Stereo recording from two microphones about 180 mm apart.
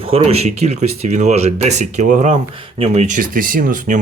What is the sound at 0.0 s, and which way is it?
Speech, 35° right (ahead or behind).